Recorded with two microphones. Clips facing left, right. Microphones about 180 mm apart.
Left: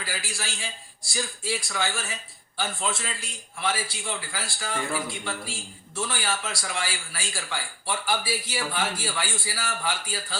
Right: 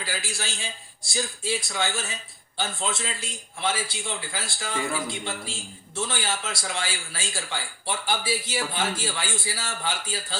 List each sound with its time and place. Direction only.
0.0 s a man's voice: 25° right (ahead or behind)